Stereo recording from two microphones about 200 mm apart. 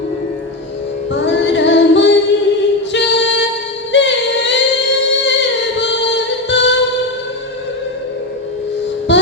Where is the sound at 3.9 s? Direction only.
60° left (ahead or behind).